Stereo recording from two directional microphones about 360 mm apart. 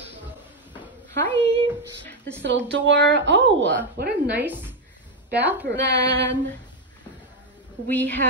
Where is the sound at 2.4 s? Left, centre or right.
Right.